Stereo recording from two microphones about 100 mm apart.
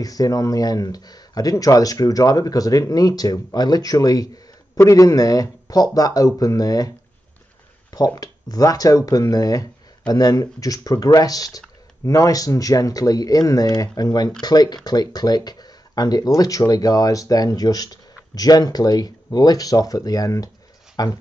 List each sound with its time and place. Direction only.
0.0 s speech: 35° left (ahead or behind)
7.9 s speech: 40° left (ahead or behind)